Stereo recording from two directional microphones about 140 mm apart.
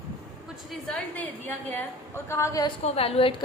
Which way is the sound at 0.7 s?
5° left (ahead or behind).